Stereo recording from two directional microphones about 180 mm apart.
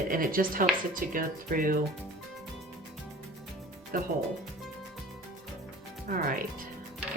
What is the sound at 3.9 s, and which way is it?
Speech, 50° right (ahead or behind).